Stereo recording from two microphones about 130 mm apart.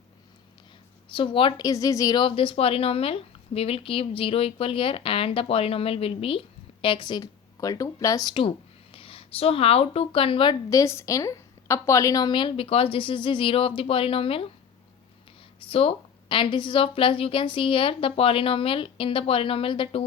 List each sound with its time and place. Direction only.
1.1 s a woman's voice: 40° left (ahead or behind)
2.2 s a woman's voice: 45° left (ahead or behind)
10.7 s a woman's voice: 25° left (ahead or behind); by 14.4 s 45° left (ahead or behind)
15.7 s a woman's voice: 45° left (ahead or behind)